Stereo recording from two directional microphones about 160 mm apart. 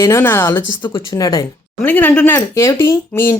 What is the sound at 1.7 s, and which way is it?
Speech, 10° left (ahead or behind).